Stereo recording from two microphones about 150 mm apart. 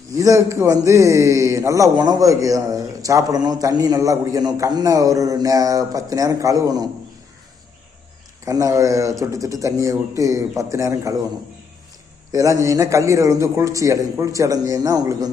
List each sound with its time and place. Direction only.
0.1 s a man's voice: 20° right (ahead or behind)
8.4 s a man's voice: 20° right (ahead or behind)
12.3 s a man's voice: 20° right (ahead or behind)